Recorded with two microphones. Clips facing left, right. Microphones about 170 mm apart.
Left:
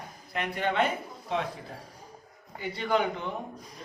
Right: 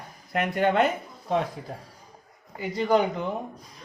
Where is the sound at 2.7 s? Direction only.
40° right (ahead or behind).